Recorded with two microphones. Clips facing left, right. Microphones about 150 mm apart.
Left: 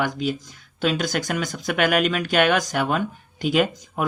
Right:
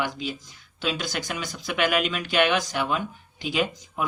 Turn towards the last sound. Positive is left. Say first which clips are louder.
# left 5 dB
turn(degrees=50)  # may be behind; listen again after turning